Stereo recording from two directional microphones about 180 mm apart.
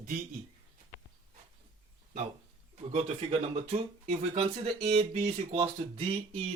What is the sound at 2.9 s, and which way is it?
Speech, 35° right (ahead or behind).